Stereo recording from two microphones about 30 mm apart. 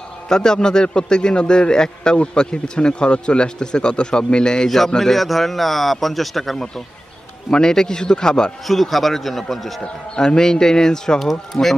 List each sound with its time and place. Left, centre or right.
0.3 s a man's voice: left
4.6 s a man's voice: centre
7.5 s a man's voice: left
8.6 s a man's voice: centre
10.1 s a man's voice: left
11.5 s a man's voice: centre